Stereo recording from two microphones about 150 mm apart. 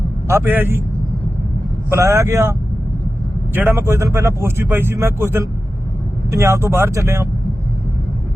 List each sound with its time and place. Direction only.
0.3 s speech: 15° right (ahead or behind)
1.9 s speech: 20° right (ahead or behind)